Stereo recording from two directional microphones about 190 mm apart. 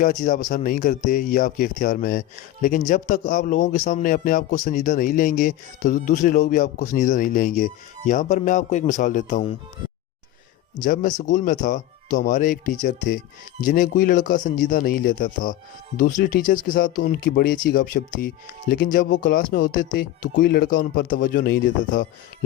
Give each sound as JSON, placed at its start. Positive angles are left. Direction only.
{"t": 0.0, "sound": "speech", "side_deg": 45}
{"t": 10.8, "sound": "speech", "side_deg": 45}